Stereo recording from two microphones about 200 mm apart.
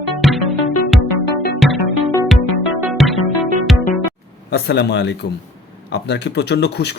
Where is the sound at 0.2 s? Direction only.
Centre (ahead or behind).